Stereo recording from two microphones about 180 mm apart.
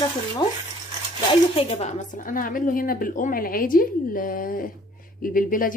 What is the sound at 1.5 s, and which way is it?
A woman's voice, 35° left (ahead or behind).